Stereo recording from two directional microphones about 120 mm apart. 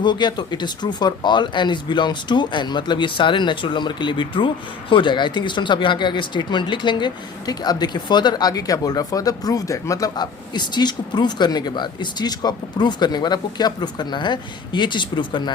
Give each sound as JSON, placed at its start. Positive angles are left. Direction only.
{"t": 0.0, "sound": "speech", "side_deg": 40}